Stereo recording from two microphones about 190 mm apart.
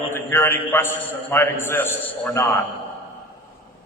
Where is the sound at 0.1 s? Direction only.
10° left (ahead or behind).